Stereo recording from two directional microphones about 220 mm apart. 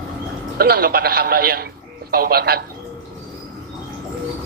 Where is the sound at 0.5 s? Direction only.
45° right (ahead or behind).